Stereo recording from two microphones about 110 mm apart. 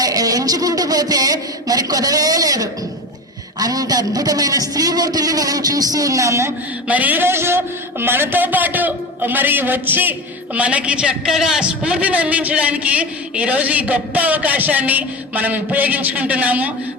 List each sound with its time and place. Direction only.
0.0 s a man's voice: 35° right (ahead or behind)
6.8 s a man's voice: 15° right (ahead or behind)